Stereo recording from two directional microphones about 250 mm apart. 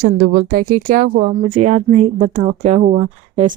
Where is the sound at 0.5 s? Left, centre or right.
Right.